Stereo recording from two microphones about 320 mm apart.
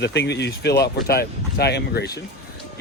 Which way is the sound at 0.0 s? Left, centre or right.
Left.